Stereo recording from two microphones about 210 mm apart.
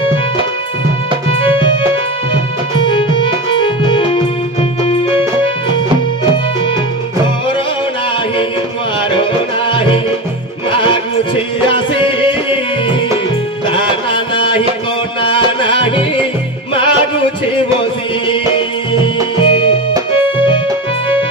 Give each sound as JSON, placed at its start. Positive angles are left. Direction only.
{"t": 2.7, "sound": "music", "side_deg": 25}
{"t": 9.1, "sound": "music", "side_deg": 25}
{"t": 13.7, "sound": "music", "side_deg": 25}
{"t": 19.3, "sound": "music", "side_deg": 25}